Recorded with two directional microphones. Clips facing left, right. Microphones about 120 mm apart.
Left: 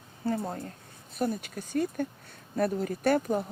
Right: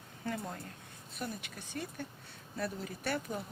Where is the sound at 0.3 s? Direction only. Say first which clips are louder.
Left 8 dB; 35° left (ahead or behind).